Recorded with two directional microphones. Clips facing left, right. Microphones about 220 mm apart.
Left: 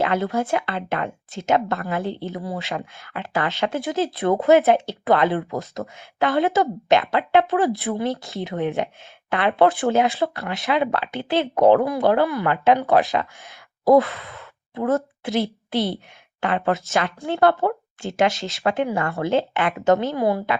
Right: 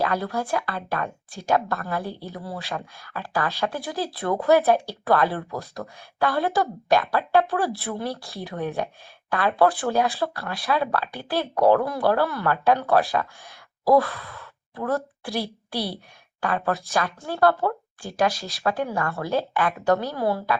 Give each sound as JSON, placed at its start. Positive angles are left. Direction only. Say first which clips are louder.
{"t": 0.0, "sound": "speech", "louder": "left 4 dB", "side_deg": 25}